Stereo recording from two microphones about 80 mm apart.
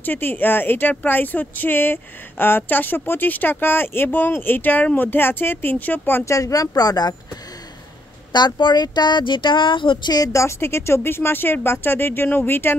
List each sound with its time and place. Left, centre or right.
0.0 s speech: left
6.2 s speech: left
8.3 s a woman's voice: left
10.3 s speech: left